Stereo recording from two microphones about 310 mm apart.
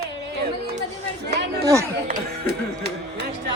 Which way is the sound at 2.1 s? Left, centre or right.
Right.